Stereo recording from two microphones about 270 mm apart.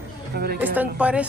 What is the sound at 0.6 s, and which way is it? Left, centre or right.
Speech, centre.